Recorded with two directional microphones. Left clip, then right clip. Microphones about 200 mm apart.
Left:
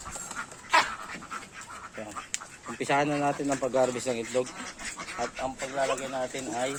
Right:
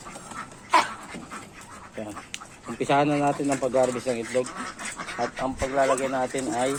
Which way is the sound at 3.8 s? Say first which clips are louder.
Right 2 dB; 20° left (ahead or behind).